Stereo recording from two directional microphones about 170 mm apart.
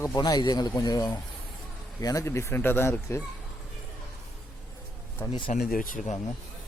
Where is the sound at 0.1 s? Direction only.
25° left (ahead or behind).